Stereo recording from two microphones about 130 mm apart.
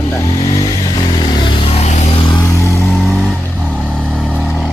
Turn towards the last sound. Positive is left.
turn(degrees=0)  # may be behind; listen again after turning